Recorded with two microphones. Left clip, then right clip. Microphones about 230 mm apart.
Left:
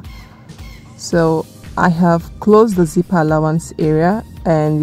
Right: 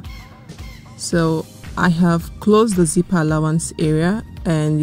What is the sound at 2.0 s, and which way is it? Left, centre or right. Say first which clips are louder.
Speech: left 5 dB; right.